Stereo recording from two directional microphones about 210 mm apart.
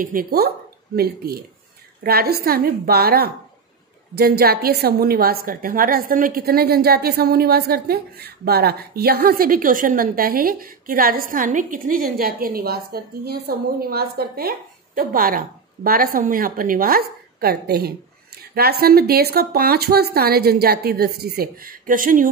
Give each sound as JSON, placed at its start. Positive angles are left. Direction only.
{"t": 0.0, "sound": "a woman's voice", "side_deg": -45}